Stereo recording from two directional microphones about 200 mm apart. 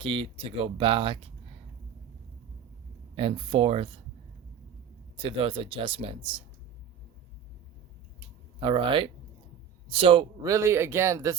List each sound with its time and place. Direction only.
0.0 s speech: 25° right (ahead or behind)
3.2 s speech: 25° right (ahead or behind)
5.1 s speech: 25° right (ahead or behind)
8.6 s speech: 25° right (ahead or behind)